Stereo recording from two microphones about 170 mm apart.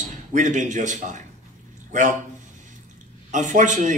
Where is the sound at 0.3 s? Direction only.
45° right (ahead or behind).